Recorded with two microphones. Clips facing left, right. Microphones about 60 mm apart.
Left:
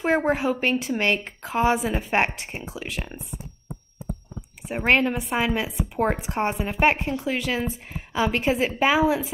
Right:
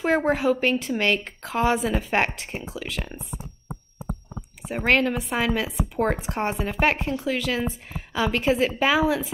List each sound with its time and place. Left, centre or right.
0.0 s a woman's voice: centre
4.6 s a woman's voice: centre
9.0 s speech: centre